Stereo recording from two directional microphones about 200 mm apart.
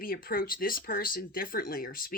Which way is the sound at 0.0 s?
45° left (ahead or behind).